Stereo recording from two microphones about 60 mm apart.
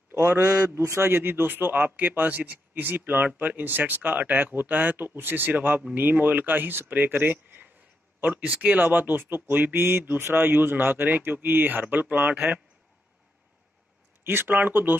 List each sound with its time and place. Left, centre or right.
0.1 s a sound: right
0.6 s speech: right
14.2 s speech: right